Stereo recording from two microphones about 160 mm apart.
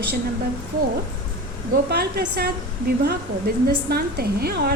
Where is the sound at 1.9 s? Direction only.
80° right.